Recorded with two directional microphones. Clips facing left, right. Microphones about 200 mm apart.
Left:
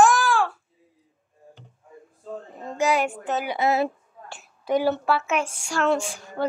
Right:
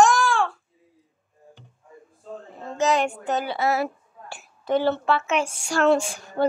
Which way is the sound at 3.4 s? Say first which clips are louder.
Left 4 dB; 15° left (ahead or behind).